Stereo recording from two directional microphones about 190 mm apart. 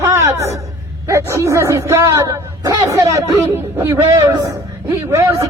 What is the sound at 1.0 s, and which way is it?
A man's voice, 15° right (ahead or behind).